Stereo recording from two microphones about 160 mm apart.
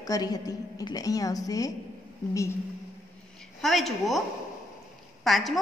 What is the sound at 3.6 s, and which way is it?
Speech, centre (ahead or behind).